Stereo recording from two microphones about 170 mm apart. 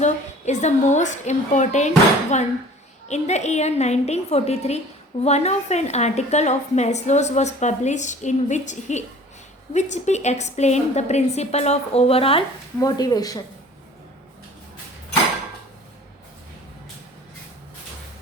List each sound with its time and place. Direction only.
0.0 s a woman's voice: 45° left (ahead or behind)
12.8 s speech: 20° left (ahead or behind)